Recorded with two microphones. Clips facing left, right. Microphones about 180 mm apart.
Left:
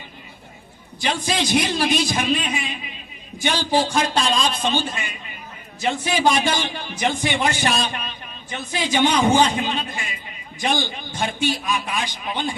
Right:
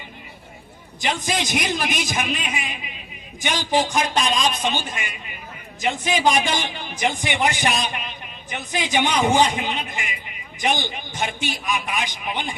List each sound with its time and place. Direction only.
1.0 s a man's voice: 15° right (ahead or behind)